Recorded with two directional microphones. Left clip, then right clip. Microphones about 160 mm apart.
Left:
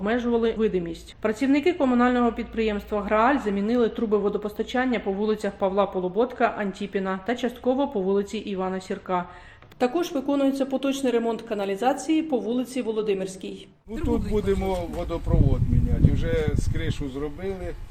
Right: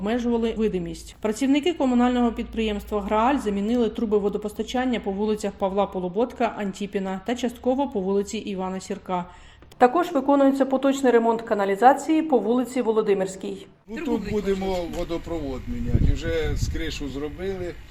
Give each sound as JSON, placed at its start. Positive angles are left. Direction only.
{"t": 0.0, "sound": "speech", "side_deg": -35}
{"t": 9.8, "sound": "a woman's voice", "side_deg": 5}
{"t": 16.2, "sound": "a woman's voice", "side_deg": -5}